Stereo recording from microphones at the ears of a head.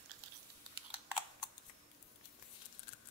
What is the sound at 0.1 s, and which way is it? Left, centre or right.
Typing, right.